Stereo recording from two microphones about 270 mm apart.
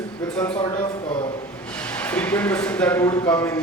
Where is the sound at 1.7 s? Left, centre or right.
Centre.